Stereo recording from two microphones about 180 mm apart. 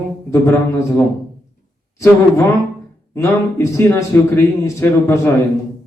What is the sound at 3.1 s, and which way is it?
A man's voice, 15° left (ahead or behind).